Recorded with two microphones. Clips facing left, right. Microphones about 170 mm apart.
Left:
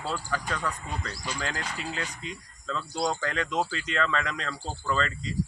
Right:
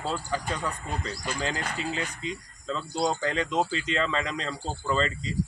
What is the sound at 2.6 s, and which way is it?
Speech, 30° right (ahead or behind).